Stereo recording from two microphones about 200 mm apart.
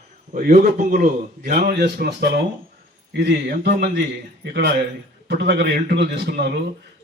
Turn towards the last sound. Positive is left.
turn(degrees=-55)  # may be behind; listen again after turning